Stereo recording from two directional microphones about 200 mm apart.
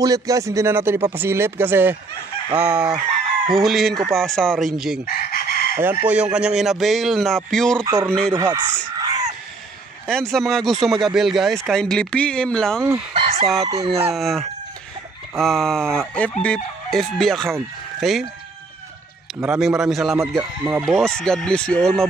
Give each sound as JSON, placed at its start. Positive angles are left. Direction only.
{"t": 0.0, "sound": "speech", "side_deg": -15}
{"t": 5.0, "sound": "chicken", "side_deg": 50}
{"t": 5.8, "sound": "speech", "side_deg": -10}
{"t": 7.8, "sound": "speech", "side_deg": -15}
{"t": 10.0, "sound": "speech", "side_deg": 0}
{"t": 13.1, "sound": "fowl", "side_deg": -25}
{"t": 13.7, "sound": "speech", "side_deg": -20}
{"t": 14.1, "sound": "speech", "side_deg": 0}
{"t": 19.4, "sound": "speech", "side_deg": -5}
{"t": 20.2, "sound": "speech", "side_deg": -10}
{"t": 20.8, "sound": "speech", "side_deg": 0}